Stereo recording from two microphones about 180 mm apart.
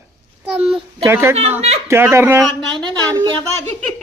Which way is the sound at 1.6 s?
35° right (ahead or behind).